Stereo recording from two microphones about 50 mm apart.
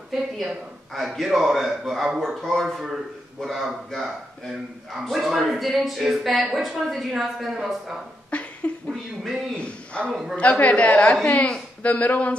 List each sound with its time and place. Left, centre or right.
0.1 s a man's voice: centre
8.3 s a sound: left
9.6 s a man's voice: left